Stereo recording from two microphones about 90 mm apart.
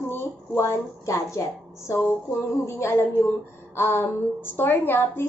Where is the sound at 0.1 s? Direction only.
25° left (ahead or behind).